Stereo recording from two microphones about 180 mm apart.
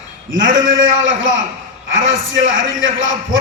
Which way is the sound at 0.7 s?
90° right.